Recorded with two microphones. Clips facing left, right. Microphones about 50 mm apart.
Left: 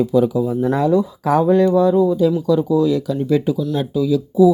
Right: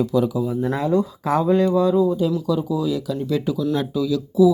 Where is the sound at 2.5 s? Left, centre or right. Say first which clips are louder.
Left 6 dB; left.